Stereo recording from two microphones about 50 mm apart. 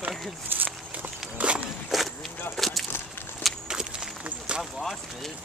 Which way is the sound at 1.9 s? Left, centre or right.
Centre.